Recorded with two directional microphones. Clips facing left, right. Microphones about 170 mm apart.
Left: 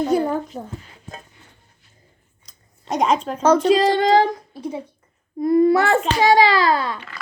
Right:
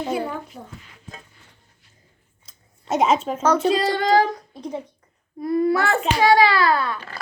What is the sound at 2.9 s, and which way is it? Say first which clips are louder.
Speech: even; 5° right (ahead or behind).